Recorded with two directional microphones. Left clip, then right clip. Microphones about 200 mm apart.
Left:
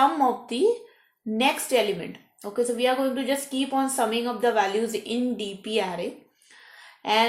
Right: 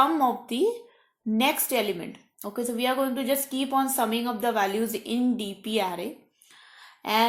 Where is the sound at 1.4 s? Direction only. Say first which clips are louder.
Left 3 dB; 40° right (ahead or behind).